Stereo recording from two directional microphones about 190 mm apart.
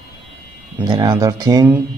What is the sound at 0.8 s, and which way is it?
Speech, 20° right (ahead or behind).